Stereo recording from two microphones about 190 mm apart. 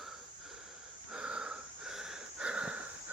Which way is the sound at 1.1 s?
5° right (ahead or behind).